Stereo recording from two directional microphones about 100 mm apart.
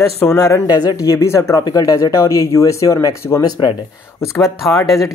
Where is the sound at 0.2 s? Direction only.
30° left (ahead or behind).